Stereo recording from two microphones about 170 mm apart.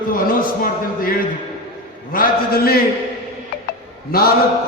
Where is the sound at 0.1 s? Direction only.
55° left (ahead or behind).